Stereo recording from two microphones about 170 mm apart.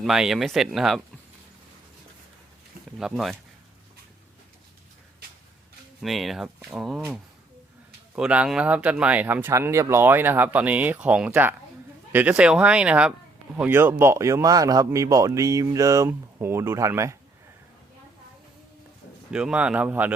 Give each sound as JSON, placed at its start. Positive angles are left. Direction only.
{"t": 0.0, "sound": "speech", "side_deg": 0}
{"t": 3.0, "sound": "speech", "side_deg": 0}
{"t": 6.0, "sound": "speech", "side_deg": 0}
{"t": 19.3, "sound": "speech", "side_deg": -5}